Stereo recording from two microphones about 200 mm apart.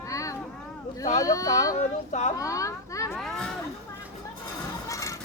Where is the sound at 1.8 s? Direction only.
35° left (ahead or behind).